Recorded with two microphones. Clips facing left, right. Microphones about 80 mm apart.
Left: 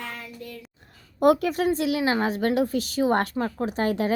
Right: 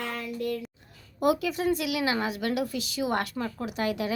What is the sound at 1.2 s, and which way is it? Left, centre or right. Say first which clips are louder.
Speech: left 5 dB; left.